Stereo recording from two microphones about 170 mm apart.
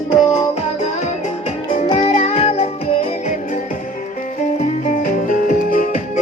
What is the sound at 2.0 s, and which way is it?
Music, 40° left (ahead or behind).